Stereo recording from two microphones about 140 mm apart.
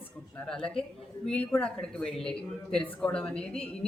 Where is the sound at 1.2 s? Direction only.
5° left (ahead or behind).